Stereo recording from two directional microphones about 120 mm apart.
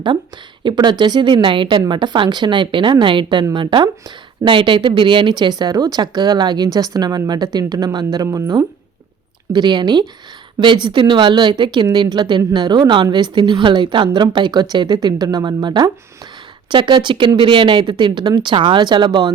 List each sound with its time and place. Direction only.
0.6 s speech: 40° right (ahead or behind)